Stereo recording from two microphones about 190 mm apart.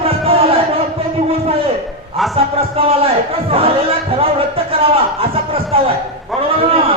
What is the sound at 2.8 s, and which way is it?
Speech, 30° right (ahead or behind).